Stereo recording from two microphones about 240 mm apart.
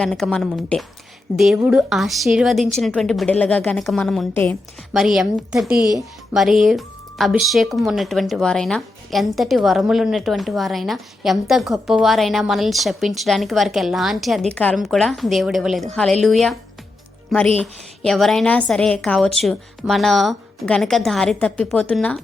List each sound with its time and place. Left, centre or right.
0.0 s speech: centre
5.8 s speech: centre
6.3 s speech: centre
17.6 s speech: centre